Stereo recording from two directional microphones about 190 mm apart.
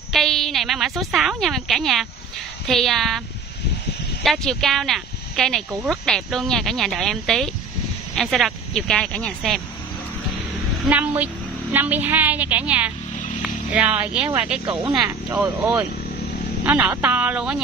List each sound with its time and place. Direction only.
0.1 s a woman's voice: centre (ahead or behind)
4.2 s speech: centre (ahead or behind)
10.9 s a woman's voice: 10° right (ahead or behind)
14.9 s a woman's voice: 20° right (ahead or behind)